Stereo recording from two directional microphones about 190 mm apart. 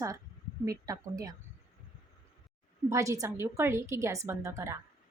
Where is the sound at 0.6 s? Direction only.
15° right (ahead or behind).